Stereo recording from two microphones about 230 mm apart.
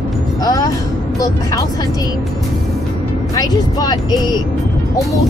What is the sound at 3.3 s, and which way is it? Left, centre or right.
Speech, centre.